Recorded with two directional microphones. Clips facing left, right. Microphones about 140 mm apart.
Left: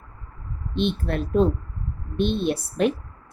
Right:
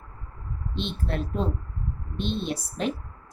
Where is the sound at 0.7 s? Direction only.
60° left (ahead or behind).